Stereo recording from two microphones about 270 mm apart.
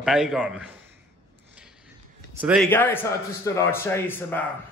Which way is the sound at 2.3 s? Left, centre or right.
Centre.